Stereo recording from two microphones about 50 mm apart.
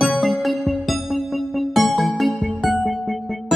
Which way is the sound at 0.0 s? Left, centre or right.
Centre.